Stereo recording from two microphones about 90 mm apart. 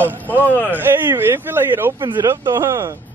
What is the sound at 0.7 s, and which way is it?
Speech, 20° right (ahead or behind).